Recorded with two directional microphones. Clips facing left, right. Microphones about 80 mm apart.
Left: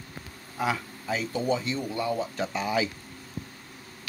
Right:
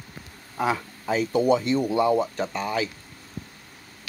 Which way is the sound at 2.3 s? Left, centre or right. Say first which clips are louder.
Right 1 dB; centre.